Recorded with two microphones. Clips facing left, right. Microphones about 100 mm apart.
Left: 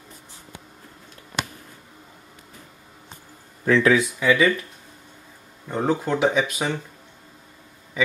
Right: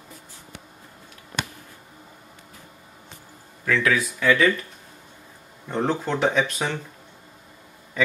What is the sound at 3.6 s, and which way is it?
Speech, 30° left (ahead or behind).